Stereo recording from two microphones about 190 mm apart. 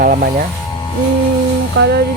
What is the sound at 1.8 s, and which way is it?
Speech, 65° right (ahead or behind).